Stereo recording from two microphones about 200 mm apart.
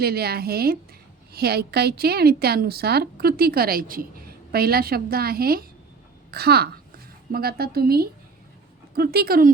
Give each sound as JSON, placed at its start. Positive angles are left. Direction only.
{"t": 0.0, "sound": "a woman's voice", "side_deg": -50}